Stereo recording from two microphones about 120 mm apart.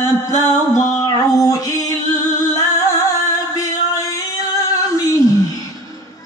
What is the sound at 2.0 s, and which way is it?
Music, 40° right (ahead or behind).